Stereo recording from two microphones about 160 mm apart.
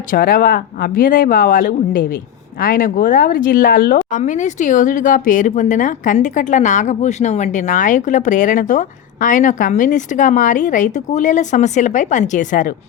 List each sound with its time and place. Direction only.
0.1 s speech: 65° left (ahead or behind)
4.2 s speech: 50° left (ahead or behind)